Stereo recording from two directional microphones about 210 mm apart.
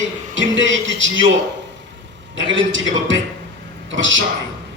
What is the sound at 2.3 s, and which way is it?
A man's voice, 60° right (ahead or behind).